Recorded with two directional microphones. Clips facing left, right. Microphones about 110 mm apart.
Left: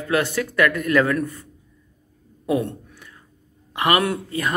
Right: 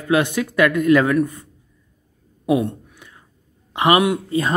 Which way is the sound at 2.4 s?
20° right (ahead or behind).